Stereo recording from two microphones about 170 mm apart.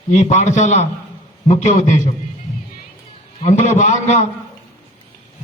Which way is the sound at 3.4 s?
45° left (ahead or behind).